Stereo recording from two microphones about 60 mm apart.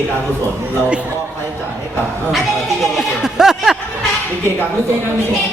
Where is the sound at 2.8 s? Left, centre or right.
Centre.